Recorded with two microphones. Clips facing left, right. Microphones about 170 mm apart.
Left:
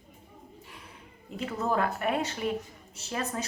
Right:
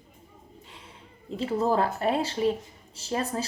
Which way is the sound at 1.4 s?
30° right (ahead or behind).